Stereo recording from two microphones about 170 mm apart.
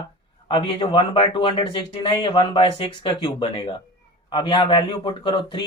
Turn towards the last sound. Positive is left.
turn(degrees=25)  # may be behind; listen again after turning